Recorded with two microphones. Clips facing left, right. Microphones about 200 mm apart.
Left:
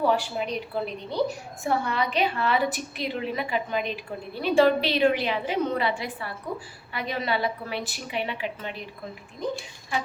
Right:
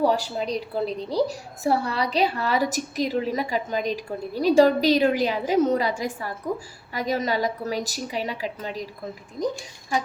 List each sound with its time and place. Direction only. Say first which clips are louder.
0.0 s a woman's voice: right 2 dB; 35° right (ahead or behind)